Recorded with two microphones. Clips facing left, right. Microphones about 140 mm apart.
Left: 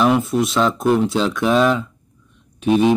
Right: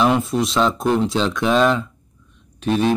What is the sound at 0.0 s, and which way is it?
Speech, 5° left (ahead or behind).